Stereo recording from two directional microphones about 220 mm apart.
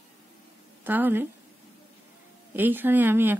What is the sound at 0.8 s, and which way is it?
Speech, 10° right (ahead or behind).